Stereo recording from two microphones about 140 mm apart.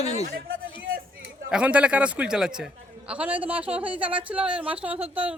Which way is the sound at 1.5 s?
10° right (ahead or behind).